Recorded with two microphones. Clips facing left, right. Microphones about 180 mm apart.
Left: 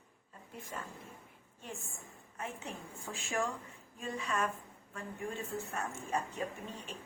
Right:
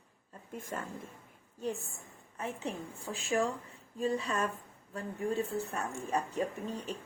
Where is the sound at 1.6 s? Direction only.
35° right (ahead or behind).